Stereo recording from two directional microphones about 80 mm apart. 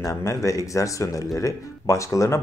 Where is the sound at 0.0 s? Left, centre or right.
Left.